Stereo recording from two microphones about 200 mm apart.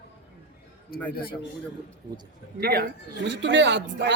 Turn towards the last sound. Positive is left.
turn(degrees=-60)  # may be behind; listen again after turning